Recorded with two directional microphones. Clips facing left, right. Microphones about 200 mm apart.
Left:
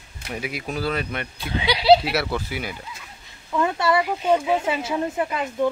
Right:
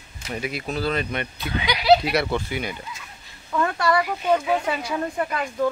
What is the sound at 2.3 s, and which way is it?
Speech, 5° left (ahead or behind).